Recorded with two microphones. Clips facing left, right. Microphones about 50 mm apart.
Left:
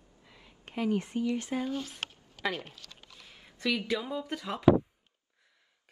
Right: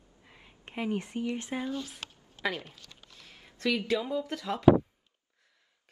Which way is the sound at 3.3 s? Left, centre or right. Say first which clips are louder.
Right 1 dB; centre.